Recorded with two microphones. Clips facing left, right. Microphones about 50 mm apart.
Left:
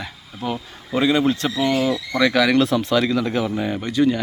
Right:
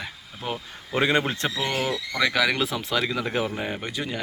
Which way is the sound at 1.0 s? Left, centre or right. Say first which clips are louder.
Left 5 dB; right.